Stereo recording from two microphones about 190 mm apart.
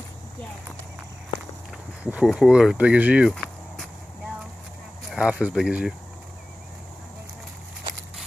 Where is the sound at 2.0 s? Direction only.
5° right (ahead or behind).